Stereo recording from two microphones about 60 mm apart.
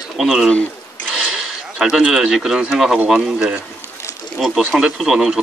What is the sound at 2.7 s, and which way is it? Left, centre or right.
A man's voice, centre.